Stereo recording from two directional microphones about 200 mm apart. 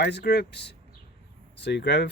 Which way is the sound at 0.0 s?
55° left (ahead or behind).